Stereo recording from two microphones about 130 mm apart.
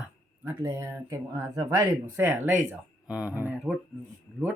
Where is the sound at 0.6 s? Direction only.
20° right (ahead or behind).